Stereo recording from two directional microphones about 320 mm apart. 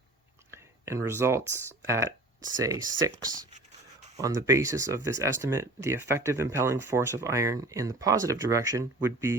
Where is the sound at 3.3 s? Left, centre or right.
Right.